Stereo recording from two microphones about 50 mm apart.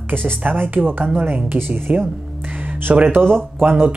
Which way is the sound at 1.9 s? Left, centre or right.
Right.